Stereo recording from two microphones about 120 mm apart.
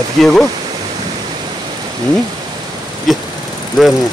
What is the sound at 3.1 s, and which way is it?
Speech, centre (ahead or behind).